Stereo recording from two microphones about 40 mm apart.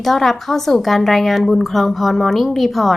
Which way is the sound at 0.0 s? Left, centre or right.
Centre.